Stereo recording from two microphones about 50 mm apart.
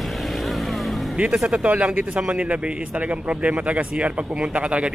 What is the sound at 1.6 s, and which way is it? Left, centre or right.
Speech, right.